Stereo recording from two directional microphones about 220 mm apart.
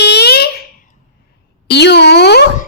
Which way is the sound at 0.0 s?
50° left (ahead or behind).